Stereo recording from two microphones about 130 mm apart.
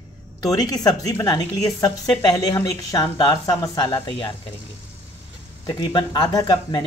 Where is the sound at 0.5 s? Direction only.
30° left (ahead or behind).